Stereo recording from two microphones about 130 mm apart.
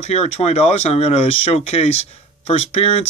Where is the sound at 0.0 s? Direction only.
55° left (ahead or behind).